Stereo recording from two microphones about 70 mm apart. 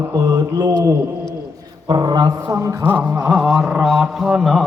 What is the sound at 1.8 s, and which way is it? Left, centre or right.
Speech, right.